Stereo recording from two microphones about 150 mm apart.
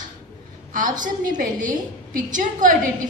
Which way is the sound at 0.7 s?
60° right (ahead or behind).